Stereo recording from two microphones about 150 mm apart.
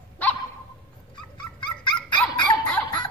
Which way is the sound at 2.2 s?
5° left (ahead or behind).